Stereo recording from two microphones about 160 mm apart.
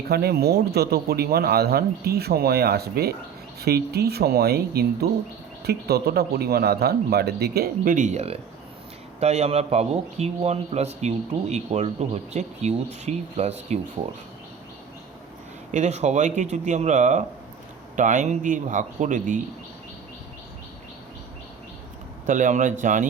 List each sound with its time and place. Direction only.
0.1 s speech: 80° right; by 13.7 s 45° right (ahead or behind)
15.7 s speech: 45° right (ahead or behind)
22.3 s speech: 50° right (ahead or behind)